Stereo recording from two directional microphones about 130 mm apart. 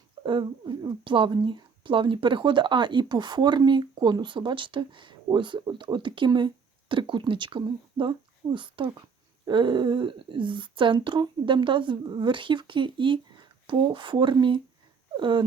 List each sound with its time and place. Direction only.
0.2 s speech: 35° right (ahead or behind)